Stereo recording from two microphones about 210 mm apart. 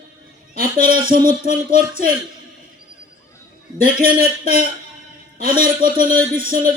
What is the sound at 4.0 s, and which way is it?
A man's voice, 45° right (ahead or behind).